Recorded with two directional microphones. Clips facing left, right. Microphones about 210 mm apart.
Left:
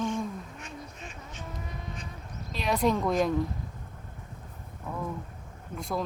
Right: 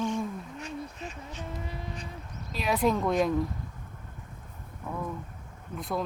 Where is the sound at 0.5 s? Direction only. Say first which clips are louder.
Right 5 dB; 35° right (ahead or behind).